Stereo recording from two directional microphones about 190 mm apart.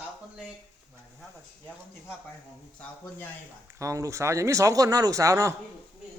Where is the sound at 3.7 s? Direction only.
15° right (ahead or behind).